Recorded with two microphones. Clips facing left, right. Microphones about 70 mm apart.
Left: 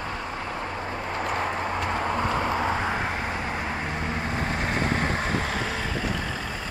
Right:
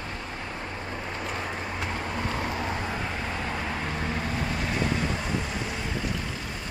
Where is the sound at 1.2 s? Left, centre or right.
Left.